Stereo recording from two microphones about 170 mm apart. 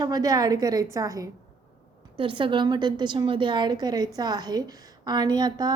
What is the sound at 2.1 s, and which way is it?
A woman's voice, 30° right (ahead or behind).